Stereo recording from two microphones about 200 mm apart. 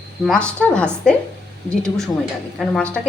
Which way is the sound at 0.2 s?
Centre (ahead or behind).